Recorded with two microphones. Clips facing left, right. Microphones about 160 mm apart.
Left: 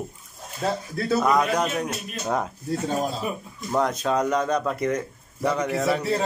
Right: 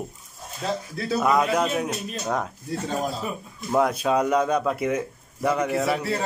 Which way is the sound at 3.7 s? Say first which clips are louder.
Right 2 dB; 10° right (ahead or behind).